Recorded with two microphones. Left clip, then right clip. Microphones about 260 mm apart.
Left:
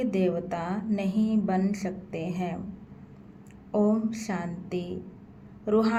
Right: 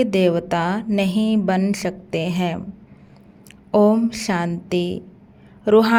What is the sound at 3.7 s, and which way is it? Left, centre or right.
A woman's voice, right.